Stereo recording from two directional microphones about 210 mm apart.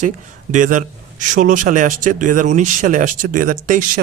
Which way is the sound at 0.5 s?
35° right (ahead or behind).